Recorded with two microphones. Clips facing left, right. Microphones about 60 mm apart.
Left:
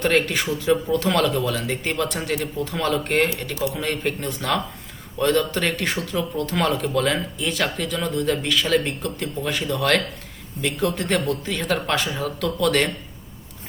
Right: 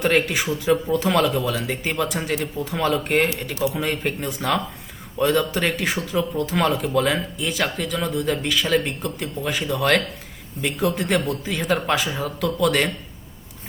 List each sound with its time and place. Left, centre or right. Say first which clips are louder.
0.0 s speech: even; centre